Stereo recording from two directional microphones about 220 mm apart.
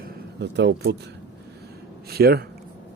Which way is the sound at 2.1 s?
45° right (ahead or behind).